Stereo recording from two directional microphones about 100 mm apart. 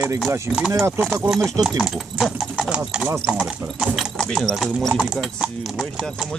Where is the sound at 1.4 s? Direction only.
35° right (ahead or behind).